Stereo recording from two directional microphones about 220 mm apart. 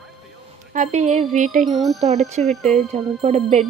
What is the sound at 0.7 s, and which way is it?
Music, 35° right (ahead or behind).